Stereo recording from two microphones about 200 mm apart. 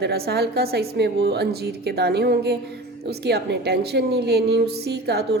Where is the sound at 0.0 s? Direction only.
55° right (ahead or behind).